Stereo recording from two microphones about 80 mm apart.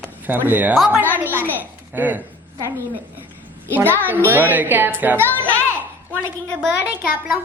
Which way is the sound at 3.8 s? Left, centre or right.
Right.